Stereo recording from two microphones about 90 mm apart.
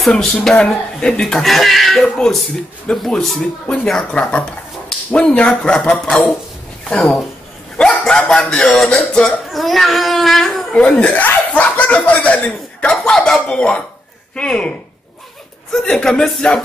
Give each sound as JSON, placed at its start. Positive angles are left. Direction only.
{"t": 0.0, "sound": "speech", "side_deg": 5}
{"t": 11.0, "sound": "speech", "side_deg": 15}
{"t": 15.7, "sound": "speech", "side_deg": 5}